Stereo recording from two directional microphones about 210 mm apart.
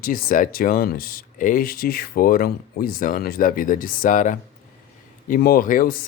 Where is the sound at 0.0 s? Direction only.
40° left (ahead or behind).